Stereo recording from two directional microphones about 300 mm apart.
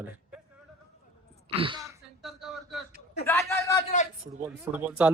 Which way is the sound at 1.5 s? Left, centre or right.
Centre.